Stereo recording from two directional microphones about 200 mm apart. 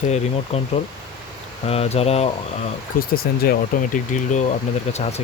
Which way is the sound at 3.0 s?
50° left (ahead or behind).